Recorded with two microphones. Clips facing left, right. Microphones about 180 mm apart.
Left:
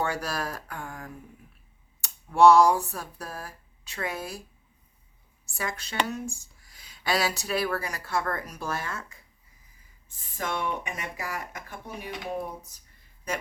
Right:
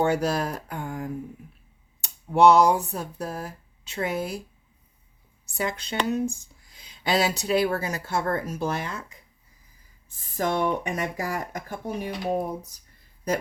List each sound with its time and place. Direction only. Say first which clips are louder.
0.0 s speech: right 7 dB; 20° right (ahead or behind)
5.5 s speech: right 3 dB; 20° right (ahead or behind)
10.3 s speech: right 6 dB; 40° right (ahead or behind)